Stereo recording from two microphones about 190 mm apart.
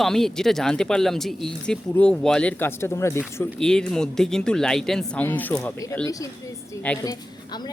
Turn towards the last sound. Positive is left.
turn(degrees=20)  # may be behind; listen again after turning